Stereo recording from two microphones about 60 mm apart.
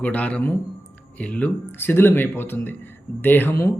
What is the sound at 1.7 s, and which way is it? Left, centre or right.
Mantra, left.